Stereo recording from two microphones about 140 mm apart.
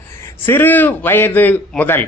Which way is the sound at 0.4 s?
15° left (ahead or behind).